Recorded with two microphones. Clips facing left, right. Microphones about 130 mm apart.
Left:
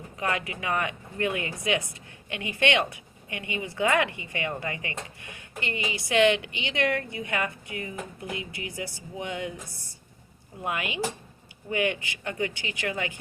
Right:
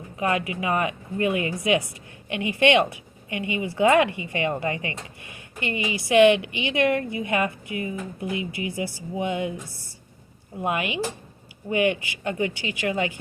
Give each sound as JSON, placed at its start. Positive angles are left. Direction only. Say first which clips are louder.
{"t": 0.2, "sound": "a woman's voice", "louder": "right 5 dB", "side_deg": -20}
{"t": 10.6, "sound": "a woman's voice", "louder": "right 4 dB", "side_deg": -20}